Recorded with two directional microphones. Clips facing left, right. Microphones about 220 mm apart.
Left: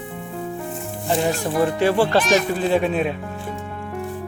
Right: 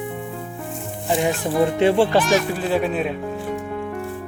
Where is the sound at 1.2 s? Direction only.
20° right (ahead or behind).